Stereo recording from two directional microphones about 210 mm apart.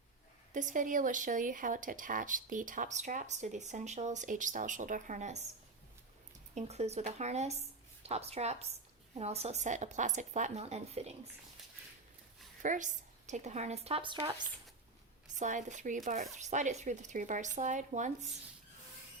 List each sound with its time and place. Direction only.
0.5 s speech: 35° right (ahead or behind)
6.5 s speech: 30° right (ahead or behind)
12.6 s speech: 35° right (ahead or behind)
15.4 s speech: 35° right (ahead or behind)